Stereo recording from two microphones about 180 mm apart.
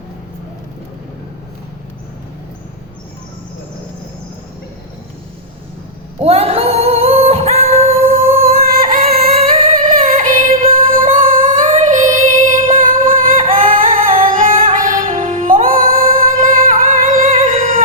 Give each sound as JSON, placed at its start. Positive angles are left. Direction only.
{"t": 6.1, "sound": "singing", "side_deg": -35}
{"t": 8.6, "sound": "music", "side_deg": -50}